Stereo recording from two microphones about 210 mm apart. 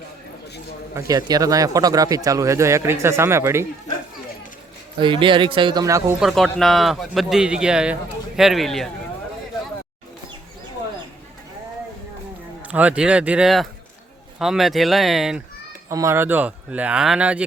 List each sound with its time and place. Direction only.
0.9 s speech: 20° right (ahead or behind)
4.9 s speech: 25° right (ahead or behind)
6.1 s speech: centre (ahead or behind)
12.6 s speech: 5° right (ahead or behind)
15.9 s speech: 15° right (ahead or behind)